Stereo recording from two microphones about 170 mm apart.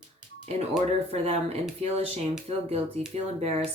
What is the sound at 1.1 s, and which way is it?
Speech, 40° right (ahead or behind).